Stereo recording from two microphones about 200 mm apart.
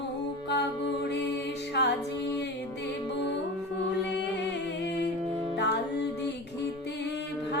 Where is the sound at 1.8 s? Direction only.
55° left (ahead or behind).